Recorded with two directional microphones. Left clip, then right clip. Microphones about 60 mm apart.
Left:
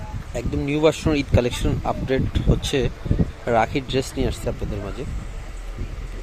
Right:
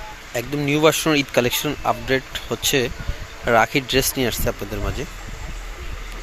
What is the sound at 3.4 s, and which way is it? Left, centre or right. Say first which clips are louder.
Speech: right 4 dB; centre.